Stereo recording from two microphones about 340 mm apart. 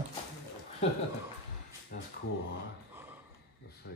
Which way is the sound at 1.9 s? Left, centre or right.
Left.